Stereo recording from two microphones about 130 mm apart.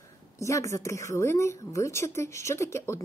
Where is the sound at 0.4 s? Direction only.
25° left (ahead or behind).